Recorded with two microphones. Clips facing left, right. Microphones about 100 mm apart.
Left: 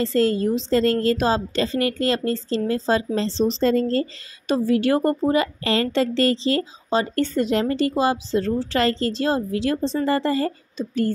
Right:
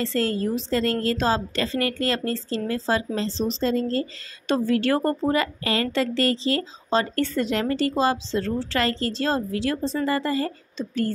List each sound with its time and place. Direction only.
0.0 s a woman's voice: 20° left (ahead or behind)
3.6 s speech: 45° left (ahead or behind)
4.5 s a woman's voice: 10° left (ahead or behind); by 10.5 s 30° left (ahead or behind)